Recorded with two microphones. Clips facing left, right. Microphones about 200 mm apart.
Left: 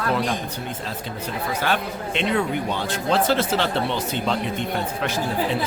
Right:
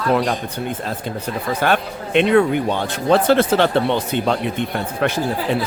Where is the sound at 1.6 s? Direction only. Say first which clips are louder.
Right 6 dB; 55° right (ahead or behind).